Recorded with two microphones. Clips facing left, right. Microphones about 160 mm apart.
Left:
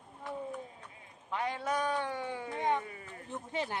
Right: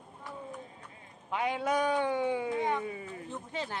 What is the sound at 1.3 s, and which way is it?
A man's voice, 15° right (ahead or behind).